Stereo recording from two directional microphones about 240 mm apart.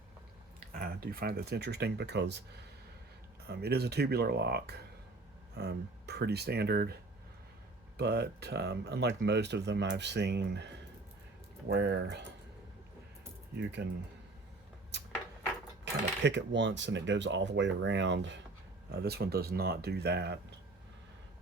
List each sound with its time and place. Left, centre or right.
0.7 s speech: right
7.9 s speech: right
11.7 s speech: right
13.6 s speech: right
14.9 s a sound: right
15.8 s speech: right